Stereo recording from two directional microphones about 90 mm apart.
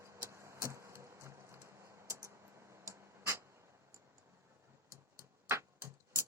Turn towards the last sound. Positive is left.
turn(degrees=-30)  # may be behind; listen again after turning